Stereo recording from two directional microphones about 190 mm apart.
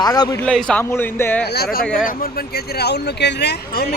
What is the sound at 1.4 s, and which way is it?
Speech, 60° left (ahead or behind).